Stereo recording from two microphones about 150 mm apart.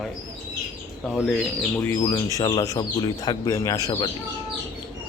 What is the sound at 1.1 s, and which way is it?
Speech, 10° left (ahead or behind).